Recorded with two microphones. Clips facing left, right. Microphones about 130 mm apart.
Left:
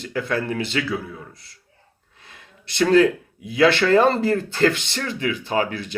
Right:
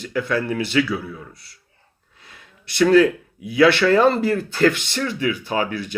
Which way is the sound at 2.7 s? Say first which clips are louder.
Right 2 dB; 30° left (ahead or behind).